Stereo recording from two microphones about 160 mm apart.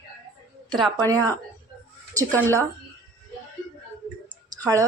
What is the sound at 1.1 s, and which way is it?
Speech, 20° right (ahead or behind).